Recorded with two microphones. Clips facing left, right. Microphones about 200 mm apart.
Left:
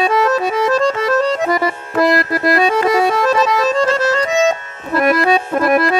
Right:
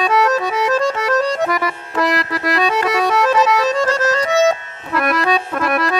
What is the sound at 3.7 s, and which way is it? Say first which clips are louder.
Music: left 2 dB; 10° right (ahead or behind).